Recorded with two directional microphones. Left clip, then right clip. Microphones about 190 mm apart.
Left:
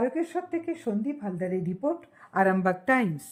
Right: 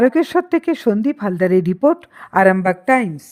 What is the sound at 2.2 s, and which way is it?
Speech, 35° right (ahead or behind).